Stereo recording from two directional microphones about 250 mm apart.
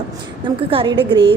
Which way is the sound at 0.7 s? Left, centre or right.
Right.